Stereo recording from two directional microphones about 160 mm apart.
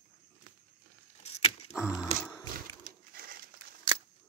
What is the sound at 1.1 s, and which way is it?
Keys jangling, 40° left (ahead or behind).